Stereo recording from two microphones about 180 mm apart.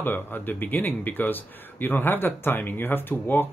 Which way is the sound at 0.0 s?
10° left (ahead or behind).